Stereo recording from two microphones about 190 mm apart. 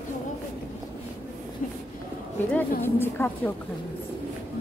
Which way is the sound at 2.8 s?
10° left (ahead or behind).